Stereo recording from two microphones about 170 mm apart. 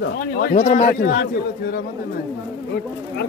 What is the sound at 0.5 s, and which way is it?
Speech, 40° left (ahead or behind).